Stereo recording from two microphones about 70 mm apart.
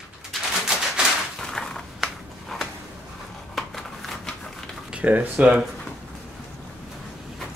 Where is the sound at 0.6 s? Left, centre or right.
Centre.